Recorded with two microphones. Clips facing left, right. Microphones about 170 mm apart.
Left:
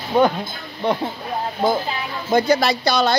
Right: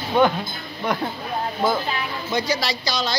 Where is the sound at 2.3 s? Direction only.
55° left (ahead or behind).